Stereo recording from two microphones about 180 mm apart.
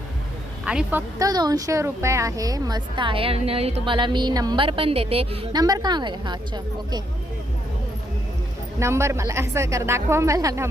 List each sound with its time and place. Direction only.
0.6 s a woman's voice: 5° right (ahead or behind)
1.3 s speech: 20° right (ahead or behind)
8.8 s a woman's voice: 15° right (ahead or behind)